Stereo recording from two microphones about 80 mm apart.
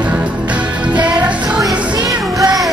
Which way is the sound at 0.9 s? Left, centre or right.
Centre.